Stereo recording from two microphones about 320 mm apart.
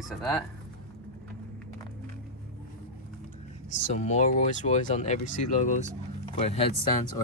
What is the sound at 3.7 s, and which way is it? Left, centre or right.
Speech, left.